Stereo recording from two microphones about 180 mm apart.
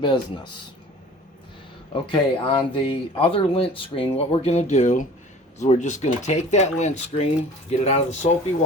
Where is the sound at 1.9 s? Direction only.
30° left (ahead or behind).